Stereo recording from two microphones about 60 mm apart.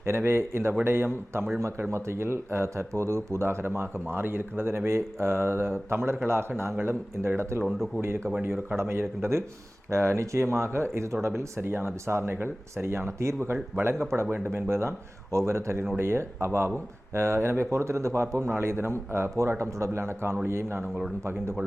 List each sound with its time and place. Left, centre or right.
0.0 s speech: right
1.9 s speech: right
7.7 s speech: centre
8.0 s speech: right